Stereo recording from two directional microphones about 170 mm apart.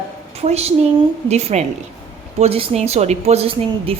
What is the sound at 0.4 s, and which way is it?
A woman's voice, 40° right (ahead or behind).